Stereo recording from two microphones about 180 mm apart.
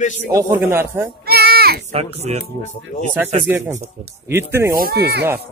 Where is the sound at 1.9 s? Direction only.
40° right (ahead or behind).